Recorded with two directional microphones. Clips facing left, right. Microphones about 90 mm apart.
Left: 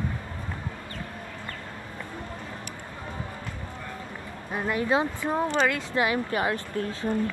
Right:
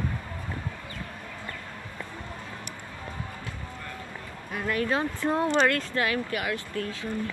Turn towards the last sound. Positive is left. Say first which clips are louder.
# left 3 dB
turn(degrees=35)  # may be behind; listen again after turning